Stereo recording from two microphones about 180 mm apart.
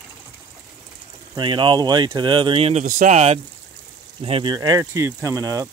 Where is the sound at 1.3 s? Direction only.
25° right (ahead or behind).